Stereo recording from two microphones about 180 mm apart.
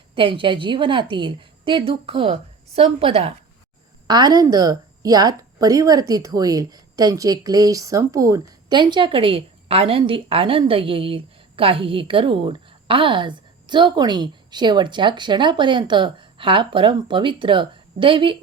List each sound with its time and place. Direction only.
0.1 s a woman's voice: 30° right (ahead or behind)
4.0 s a woman's voice: 25° right (ahead or behind)